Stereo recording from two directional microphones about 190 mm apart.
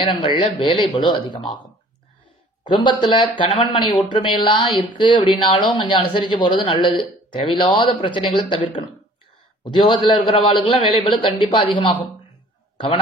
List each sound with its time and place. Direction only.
0.1 s speech: 25° left (ahead or behind)
2.7 s speech: 25° left (ahead or behind)